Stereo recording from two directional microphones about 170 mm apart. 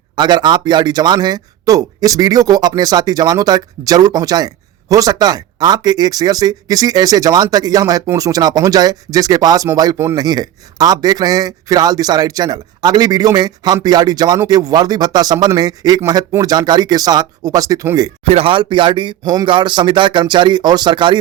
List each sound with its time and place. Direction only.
0.2 s speech: 25° right (ahead or behind)
18.3 s speech: 35° right (ahead or behind)